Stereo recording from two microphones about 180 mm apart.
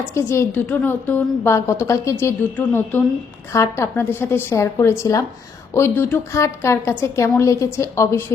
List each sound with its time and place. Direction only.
0.1 s a woman's voice: 15° left (ahead or behind)